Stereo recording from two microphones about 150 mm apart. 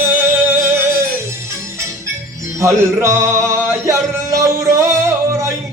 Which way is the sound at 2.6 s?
20° right (ahead or behind).